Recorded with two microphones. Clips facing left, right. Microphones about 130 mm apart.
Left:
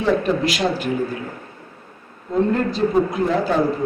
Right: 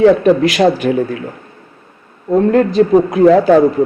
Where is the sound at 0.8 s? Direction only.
90° right.